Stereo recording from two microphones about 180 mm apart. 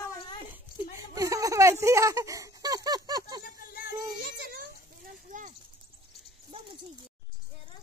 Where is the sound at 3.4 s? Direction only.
55° left (ahead or behind).